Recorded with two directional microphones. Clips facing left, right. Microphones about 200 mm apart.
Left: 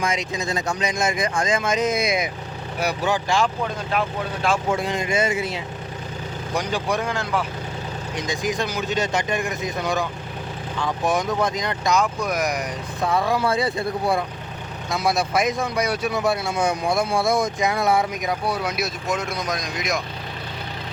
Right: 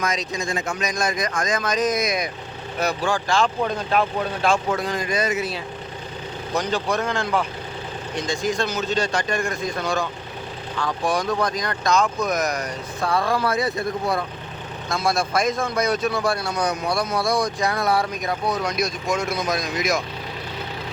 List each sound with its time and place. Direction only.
0.6 s speech: 30° left (ahead or behind)
2.7 s speech: 15° left (ahead or behind)
4.8 s speech: 25° left (ahead or behind)
6.5 s speech: 10° left (ahead or behind)
13.4 s speech: 30° left (ahead or behind)
14.8 s speech: 15° left (ahead or behind); by 20.0 s 5° right (ahead or behind)